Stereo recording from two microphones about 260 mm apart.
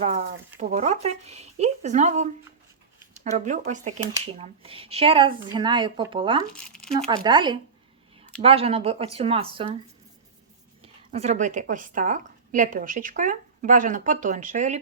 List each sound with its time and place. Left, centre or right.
0.6 s a woman's voice: right
6.6 s speech: centre
7.2 s a woman's voice: centre
11.1 s a woman's voice: right